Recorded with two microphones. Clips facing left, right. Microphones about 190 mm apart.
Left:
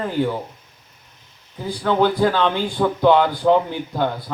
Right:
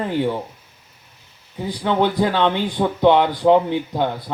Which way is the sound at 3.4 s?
20° right (ahead or behind).